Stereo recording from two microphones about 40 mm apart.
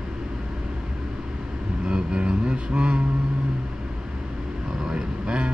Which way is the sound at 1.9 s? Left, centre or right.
Right.